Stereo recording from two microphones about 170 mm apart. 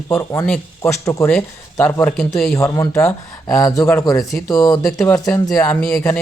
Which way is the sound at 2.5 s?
15° left (ahead or behind).